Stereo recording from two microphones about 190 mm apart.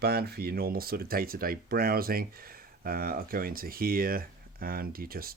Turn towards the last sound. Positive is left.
turn(degrees=-50)  # may be behind; listen again after turning